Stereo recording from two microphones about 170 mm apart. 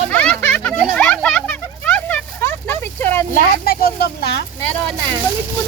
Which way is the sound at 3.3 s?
60° left (ahead or behind).